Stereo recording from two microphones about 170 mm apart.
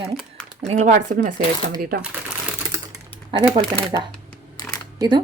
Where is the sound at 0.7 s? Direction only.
45° right (ahead or behind).